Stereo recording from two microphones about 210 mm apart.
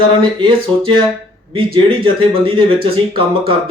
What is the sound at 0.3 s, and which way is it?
Speech, 25° right (ahead or behind).